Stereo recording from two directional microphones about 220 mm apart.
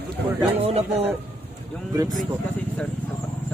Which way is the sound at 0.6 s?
25° right (ahead or behind).